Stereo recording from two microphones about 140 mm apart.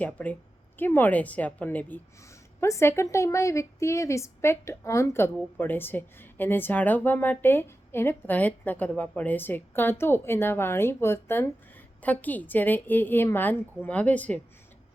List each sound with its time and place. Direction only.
0.0 s a woman's voice: 10° left (ahead or behind)